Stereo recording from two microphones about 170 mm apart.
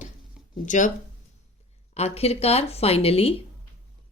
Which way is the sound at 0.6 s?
45° left (ahead or behind).